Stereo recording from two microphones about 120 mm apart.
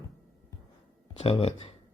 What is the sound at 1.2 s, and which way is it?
Speech, 55° left (ahead or behind).